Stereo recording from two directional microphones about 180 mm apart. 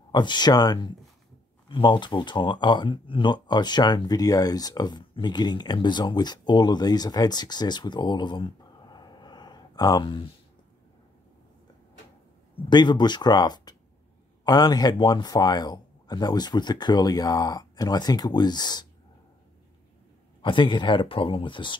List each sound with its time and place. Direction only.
0.1 s speech: 25° left (ahead or behind)
12.6 s speech: 25° left (ahead or behind)
20.4 s speech: 25° left (ahead or behind)